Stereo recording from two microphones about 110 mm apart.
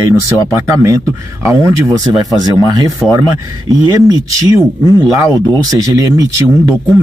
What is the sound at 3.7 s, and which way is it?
Speech, 30° right (ahead or behind).